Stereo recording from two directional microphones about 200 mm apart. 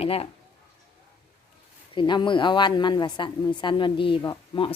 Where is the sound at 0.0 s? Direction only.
30° left (ahead or behind).